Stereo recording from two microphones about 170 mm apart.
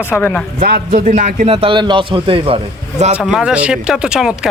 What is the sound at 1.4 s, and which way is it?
A man's voice, 30° right (ahead or behind).